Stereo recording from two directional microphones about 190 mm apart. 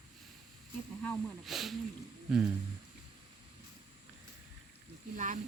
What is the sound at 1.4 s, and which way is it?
Speech, centre (ahead or behind).